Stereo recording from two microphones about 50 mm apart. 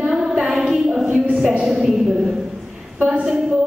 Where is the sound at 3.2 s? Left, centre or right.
Centre.